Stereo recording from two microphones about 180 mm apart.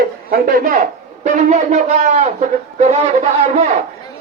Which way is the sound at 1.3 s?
40° right (ahead or behind).